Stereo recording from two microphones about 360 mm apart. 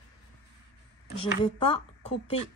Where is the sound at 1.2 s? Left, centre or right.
Centre.